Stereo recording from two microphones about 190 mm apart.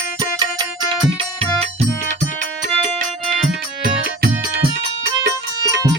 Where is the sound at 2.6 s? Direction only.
45° right (ahead or behind).